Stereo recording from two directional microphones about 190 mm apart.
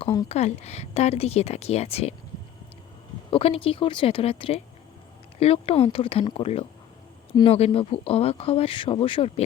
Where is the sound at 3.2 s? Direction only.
30° left (ahead or behind).